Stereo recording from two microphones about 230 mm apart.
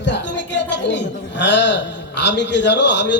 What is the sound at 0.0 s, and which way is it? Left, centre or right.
A man's voice, left.